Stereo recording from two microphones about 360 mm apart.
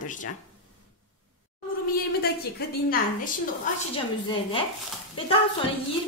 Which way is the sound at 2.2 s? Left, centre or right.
Left.